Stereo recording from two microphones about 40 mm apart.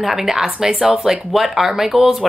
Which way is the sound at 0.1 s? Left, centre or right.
Centre.